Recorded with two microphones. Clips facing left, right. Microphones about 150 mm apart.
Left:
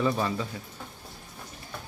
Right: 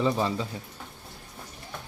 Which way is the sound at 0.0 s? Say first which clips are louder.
Right 1 dB; 20° right (ahead or behind).